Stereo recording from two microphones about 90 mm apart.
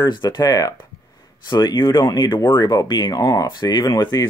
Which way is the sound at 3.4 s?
50° left (ahead or behind).